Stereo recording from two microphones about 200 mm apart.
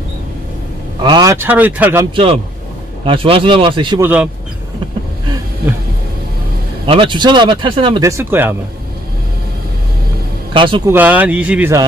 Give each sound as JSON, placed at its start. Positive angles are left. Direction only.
{"t": 1.0, "sound": "speech", "side_deg": -20}
{"t": 3.1, "sound": "speech", "side_deg": -25}
{"t": 4.0, "sound": "speech", "side_deg": -5}
{"t": 6.9, "sound": "speech", "side_deg": -25}
{"t": 10.5, "sound": "speech", "side_deg": -25}
{"t": 10.9, "sound": "speech", "side_deg": -10}